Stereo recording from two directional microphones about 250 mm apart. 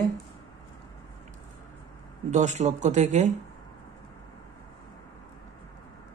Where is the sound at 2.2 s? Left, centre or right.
Right.